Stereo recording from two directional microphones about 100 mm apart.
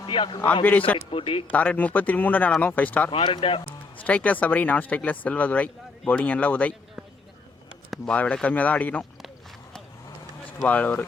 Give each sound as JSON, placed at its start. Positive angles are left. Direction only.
{"t": 0.0, "sound": "a man's voice", "side_deg": 55}
{"t": 0.6, "sound": "speech", "side_deg": 15}
{"t": 1.1, "sound": "speech", "side_deg": 65}
{"t": 1.5, "sound": "speech", "side_deg": 15}
{"t": 3.1, "sound": "speech", "side_deg": 55}
{"t": 4.0, "sound": "speech", "side_deg": 15}
{"t": 7.9, "sound": "speech", "side_deg": 10}
{"t": 10.6, "sound": "speech", "side_deg": 15}